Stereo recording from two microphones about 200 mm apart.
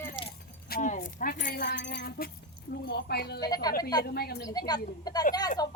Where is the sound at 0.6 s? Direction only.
45° left (ahead or behind).